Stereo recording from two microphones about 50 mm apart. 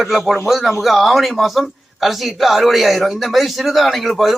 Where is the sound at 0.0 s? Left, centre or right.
Centre.